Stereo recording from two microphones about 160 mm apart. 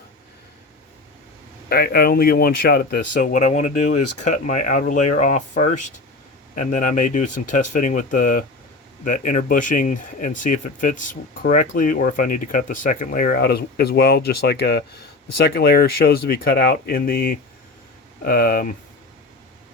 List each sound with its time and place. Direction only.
1.7 s speech: 75° left (ahead or behind); by 14.8 s 90° left
15.4 s speech: 75° left (ahead or behind)